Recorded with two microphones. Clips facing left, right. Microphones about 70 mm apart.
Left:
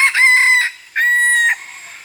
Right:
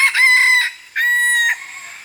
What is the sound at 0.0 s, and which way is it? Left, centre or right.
Chicken, left.